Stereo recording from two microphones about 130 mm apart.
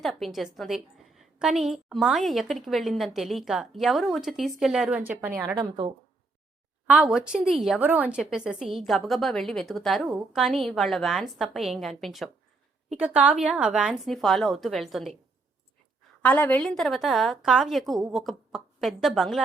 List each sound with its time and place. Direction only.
0.0 s a woman's voice: centre (ahead or behind); by 5.4 s 15° right (ahead or behind)
5.5 s speech: 40° right (ahead or behind)
6.8 s a woman's voice: 5° right (ahead or behind)
16.2 s a woman's voice: 10° left (ahead or behind)